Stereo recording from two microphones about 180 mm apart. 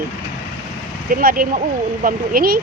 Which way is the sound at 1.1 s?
55° right (ahead or behind).